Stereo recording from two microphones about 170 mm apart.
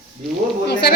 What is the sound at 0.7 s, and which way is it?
Speech, 75° left (ahead or behind).